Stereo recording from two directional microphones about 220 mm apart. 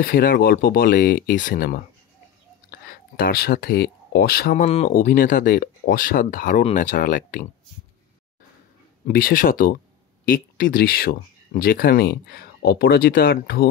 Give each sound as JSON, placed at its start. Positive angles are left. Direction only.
{"t": 0.0, "sound": "speech", "side_deg": 40}
{"t": 9.0, "sound": "speech", "side_deg": 40}